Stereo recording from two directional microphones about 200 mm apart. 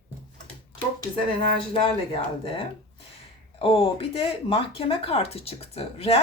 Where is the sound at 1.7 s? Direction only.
25° left (ahead or behind).